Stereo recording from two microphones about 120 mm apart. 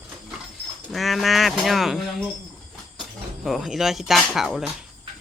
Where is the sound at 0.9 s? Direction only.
Centre (ahead or behind).